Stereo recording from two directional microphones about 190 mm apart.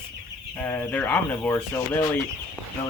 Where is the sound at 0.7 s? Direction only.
10° left (ahead or behind).